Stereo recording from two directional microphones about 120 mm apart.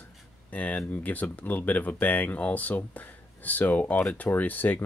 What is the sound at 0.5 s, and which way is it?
Speech, 15° left (ahead or behind).